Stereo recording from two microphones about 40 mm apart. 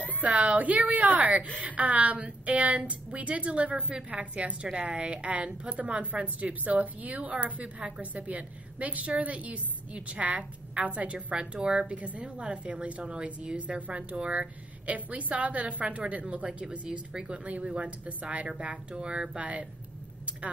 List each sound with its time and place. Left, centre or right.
0.2 s a woman's voice: right
11.3 s a woman's voice: right
19.3 s a woman's voice: right